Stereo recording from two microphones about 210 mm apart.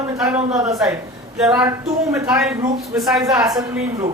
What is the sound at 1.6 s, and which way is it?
Speech, 15° right (ahead or behind).